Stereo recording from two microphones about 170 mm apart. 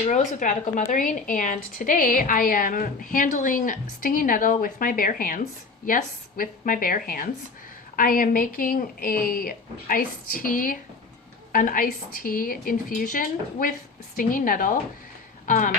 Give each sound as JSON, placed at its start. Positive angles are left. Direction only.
{"t": 0.1, "sound": "a woman's voice", "side_deg": 50}